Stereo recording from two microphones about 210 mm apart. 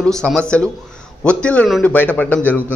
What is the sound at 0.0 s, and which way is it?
A man's voice, 5° left (ahead or behind).